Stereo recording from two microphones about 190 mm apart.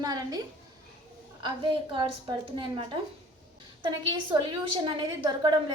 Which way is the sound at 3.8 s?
25° right (ahead or behind).